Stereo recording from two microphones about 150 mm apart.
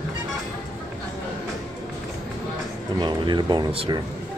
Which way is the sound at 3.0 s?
30° right (ahead or behind).